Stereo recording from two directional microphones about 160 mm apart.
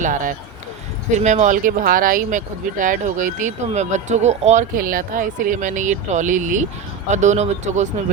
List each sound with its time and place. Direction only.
0.0 s speech: 55° right (ahead or behind)